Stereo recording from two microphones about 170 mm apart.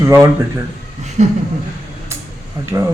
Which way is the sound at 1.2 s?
45° right (ahead or behind).